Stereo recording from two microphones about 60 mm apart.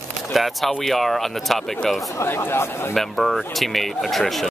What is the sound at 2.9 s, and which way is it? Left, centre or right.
Speech, centre.